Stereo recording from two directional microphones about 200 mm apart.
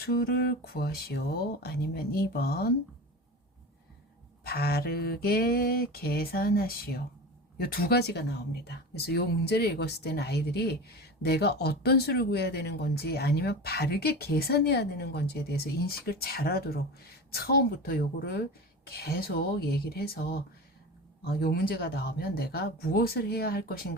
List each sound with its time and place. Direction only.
0.0 s speech: 50° left (ahead or behind)
4.4 s speech: 50° left (ahead or behind)
21.4 s speech: 50° left (ahead or behind)